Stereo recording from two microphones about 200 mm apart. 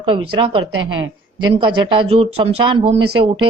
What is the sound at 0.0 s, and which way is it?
Speech, 25° right (ahead or behind).